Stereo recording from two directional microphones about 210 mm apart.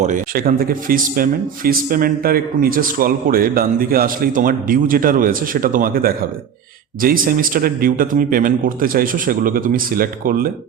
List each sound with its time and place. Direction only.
0.0 s speech: 40° right (ahead or behind)